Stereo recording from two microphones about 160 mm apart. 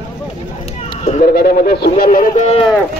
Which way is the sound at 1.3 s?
75° left (ahead or behind).